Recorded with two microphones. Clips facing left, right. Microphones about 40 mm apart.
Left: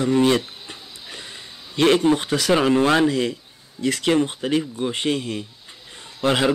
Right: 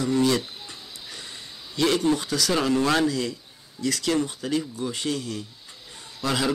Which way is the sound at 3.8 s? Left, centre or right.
Left.